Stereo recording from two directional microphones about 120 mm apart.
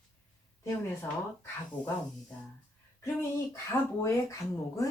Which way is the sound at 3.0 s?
25° left (ahead or behind).